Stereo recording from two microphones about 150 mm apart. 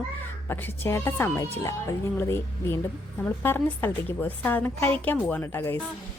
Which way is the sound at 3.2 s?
15° left (ahead or behind).